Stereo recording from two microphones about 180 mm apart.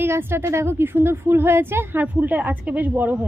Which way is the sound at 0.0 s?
10° right (ahead or behind).